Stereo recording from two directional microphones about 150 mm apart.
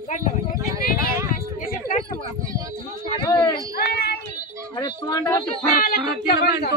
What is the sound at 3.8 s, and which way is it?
Speech, 90° left.